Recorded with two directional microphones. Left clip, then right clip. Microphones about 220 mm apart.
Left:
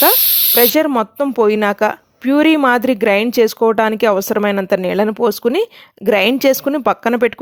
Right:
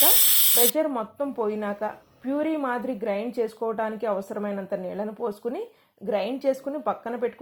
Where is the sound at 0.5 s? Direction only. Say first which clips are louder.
Left 15 dB; 45° left (ahead or behind).